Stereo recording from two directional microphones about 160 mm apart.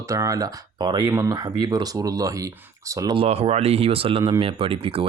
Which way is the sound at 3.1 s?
40° right (ahead or behind).